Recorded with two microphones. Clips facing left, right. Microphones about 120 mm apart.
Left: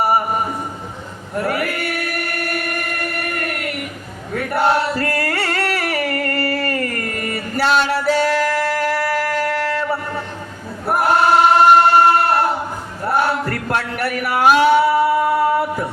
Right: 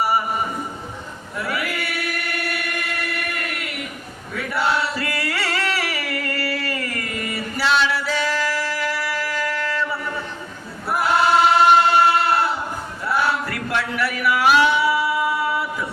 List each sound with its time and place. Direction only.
1.4 s choir: 50° left (ahead or behind)
4.4 s chant: 50° left (ahead or behind)
10.8 s choir: 50° left (ahead or behind)
13.1 s a sound: 50° left (ahead or behind)